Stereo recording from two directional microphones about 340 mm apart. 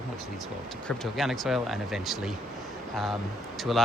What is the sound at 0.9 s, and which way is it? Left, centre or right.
Speech, centre.